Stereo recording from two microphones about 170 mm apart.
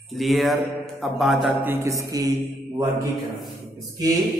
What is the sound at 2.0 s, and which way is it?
Speech, 20° right (ahead or behind).